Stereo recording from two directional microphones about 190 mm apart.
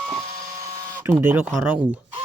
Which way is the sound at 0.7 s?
15° right (ahead or behind).